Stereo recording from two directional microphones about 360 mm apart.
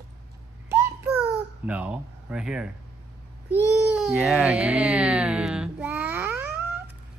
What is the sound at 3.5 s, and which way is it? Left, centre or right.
A child's voice, centre.